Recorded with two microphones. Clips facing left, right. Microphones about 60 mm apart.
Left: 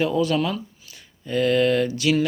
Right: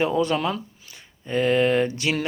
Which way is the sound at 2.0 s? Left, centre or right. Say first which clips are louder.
Left 4 dB; right.